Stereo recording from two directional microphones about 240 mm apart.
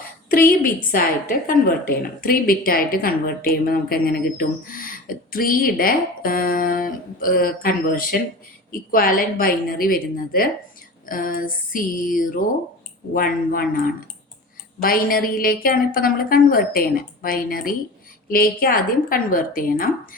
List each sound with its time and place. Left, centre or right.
0.3 s a woman's voice: left
14.8 s a woman's voice: left